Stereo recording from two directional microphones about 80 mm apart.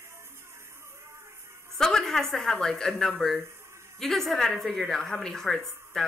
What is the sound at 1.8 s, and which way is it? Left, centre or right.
A woman's voice, centre.